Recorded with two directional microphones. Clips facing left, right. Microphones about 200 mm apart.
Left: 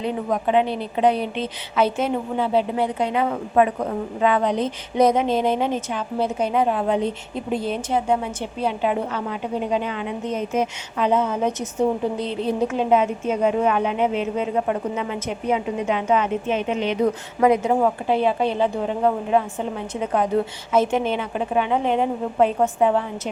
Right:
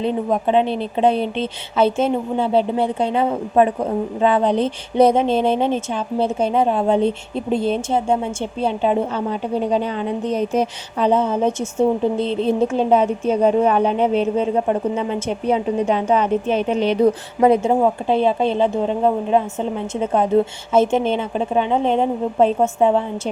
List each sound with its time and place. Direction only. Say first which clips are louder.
0.0 s speech: right 4 dB; 25° right (ahead or behind)